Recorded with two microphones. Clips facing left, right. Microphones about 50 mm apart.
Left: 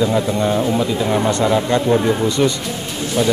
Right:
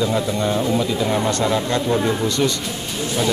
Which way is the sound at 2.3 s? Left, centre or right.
Left.